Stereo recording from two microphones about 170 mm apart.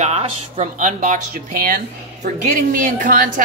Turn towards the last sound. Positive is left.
turn(degrees=-55)  # may be behind; listen again after turning